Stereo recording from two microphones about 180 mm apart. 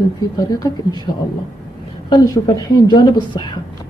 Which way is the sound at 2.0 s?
20° left (ahead or behind).